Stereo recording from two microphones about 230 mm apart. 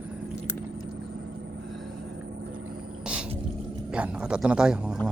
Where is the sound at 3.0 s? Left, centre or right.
Centre.